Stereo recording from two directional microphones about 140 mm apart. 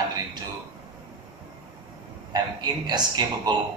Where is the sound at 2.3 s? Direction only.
30° right (ahead or behind).